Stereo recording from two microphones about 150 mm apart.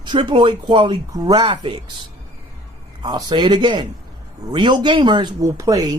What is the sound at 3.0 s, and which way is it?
Speech, 30° right (ahead or behind).